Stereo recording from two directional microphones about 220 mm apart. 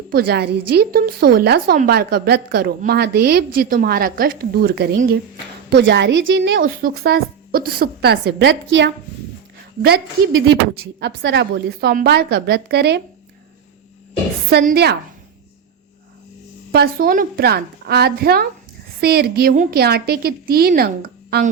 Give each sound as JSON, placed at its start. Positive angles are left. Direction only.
{"t": 0.1, "sound": "a woman's voice", "side_deg": -45}
{"t": 6.6, "sound": "a woman's voice", "side_deg": -40}
{"t": 10.3, "sound": "a woman's voice", "side_deg": -55}
{"t": 14.5, "sound": "a woman's voice", "side_deg": -45}
{"t": 16.7, "sound": "a woman's voice", "side_deg": -40}